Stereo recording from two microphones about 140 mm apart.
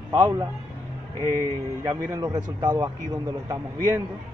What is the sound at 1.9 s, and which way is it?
A man's voice, 20° right (ahead or behind).